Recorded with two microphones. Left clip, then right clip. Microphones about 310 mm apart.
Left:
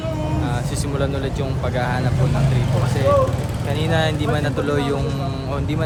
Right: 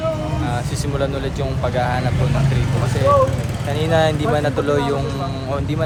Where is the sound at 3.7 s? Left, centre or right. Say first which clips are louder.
Right 4 dB; centre.